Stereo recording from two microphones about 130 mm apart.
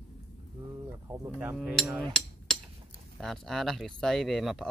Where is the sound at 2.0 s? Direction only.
5° left (ahead or behind).